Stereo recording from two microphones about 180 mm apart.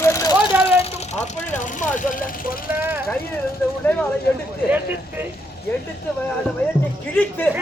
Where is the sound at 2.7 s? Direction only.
10° right (ahead or behind).